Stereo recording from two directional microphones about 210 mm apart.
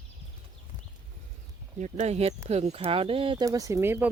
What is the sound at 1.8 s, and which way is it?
Speech, 35° right (ahead or behind).